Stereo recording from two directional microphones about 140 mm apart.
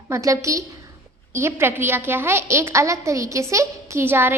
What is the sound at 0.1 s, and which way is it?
A woman's voice, 20° right (ahead or behind).